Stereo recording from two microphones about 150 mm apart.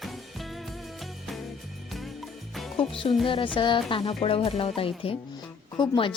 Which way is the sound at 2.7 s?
40° left (ahead or behind).